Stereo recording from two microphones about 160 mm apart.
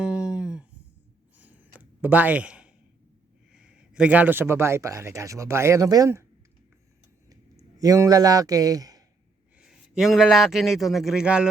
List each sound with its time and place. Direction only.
0.0 s a sound: 5° right (ahead or behind)
3.5 s speech: 5° right (ahead or behind)
7.8 s a man's voice: 20° right (ahead or behind)
9.6 s a man's voice: 5° right (ahead or behind)